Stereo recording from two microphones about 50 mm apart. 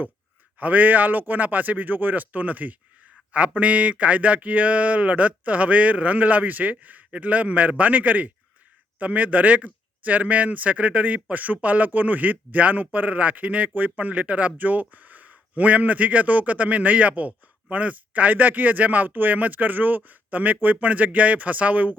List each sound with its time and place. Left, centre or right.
0.6 s speech: right